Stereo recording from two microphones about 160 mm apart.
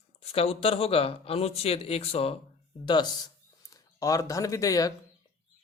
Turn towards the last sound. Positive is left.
turn(degrees=20)  # may be behind; listen again after turning